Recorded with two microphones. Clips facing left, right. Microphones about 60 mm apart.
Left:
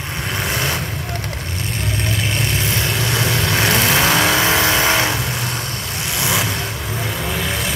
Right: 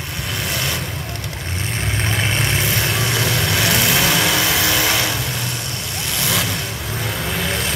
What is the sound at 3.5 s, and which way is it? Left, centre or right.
Vehicle, left.